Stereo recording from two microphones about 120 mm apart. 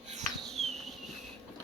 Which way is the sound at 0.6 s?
60° right (ahead or behind).